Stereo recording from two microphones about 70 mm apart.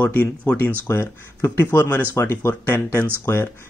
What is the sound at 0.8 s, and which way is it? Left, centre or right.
Speech, left.